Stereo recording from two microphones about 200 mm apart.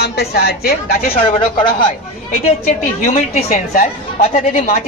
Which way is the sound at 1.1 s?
25° left (ahead or behind).